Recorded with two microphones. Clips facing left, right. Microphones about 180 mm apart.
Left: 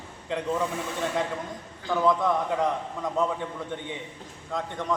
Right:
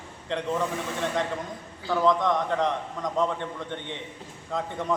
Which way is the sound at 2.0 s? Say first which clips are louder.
Right 1 dB; 5° left (ahead or behind).